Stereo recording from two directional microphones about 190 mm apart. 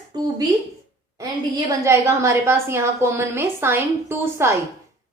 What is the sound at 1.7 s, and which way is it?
A woman's voice, 15° right (ahead or behind).